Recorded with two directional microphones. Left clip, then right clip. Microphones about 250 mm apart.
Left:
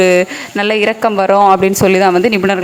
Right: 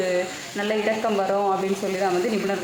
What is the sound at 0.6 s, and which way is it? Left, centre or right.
Speech, left.